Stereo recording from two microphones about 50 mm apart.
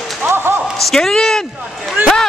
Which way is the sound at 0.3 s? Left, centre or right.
Right.